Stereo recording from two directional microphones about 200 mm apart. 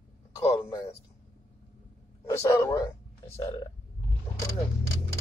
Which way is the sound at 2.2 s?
15° left (ahead or behind).